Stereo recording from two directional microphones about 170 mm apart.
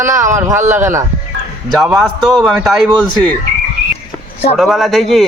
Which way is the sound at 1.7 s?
Centre (ahead or behind).